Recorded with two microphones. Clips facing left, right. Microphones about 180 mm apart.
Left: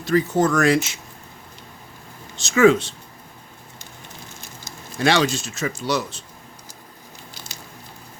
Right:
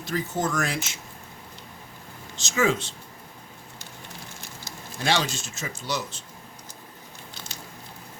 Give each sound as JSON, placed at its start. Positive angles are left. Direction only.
{"t": 0.0, "sound": "speech", "side_deg": 70}
{"t": 2.3, "sound": "speech", "side_deg": 60}
{"t": 5.0, "sound": "speech", "side_deg": 70}